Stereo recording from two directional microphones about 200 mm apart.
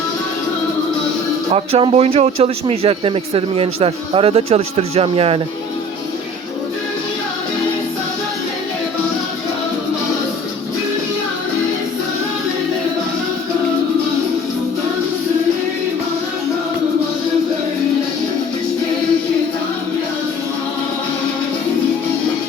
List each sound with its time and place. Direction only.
1.5 s speech: 30° right (ahead or behind)